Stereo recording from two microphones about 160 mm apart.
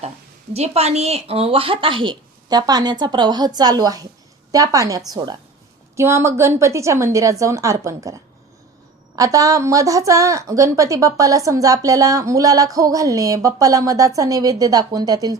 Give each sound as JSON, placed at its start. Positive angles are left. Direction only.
{"t": 0.5, "sound": "a woman's voice", "side_deg": -40}